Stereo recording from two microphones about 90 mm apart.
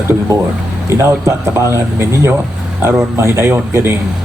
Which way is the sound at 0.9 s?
30° right (ahead or behind).